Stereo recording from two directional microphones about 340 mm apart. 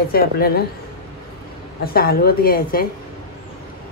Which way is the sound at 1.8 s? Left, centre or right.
Left.